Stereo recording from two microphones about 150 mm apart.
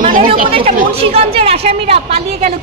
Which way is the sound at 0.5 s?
40° right (ahead or behind).